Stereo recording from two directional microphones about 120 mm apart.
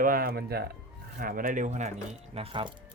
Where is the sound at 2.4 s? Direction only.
45° right (ahead or behind).